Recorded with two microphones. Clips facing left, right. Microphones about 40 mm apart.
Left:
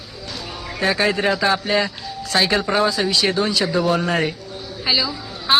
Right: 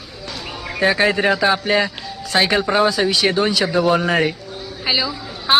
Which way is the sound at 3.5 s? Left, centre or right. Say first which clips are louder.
Right 2 dB; right.